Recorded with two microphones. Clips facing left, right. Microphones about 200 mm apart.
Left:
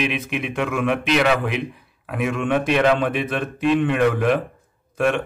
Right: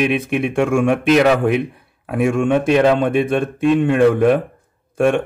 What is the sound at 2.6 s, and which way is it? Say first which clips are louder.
Speech: right 3 dB; 35° right (ahead or behind).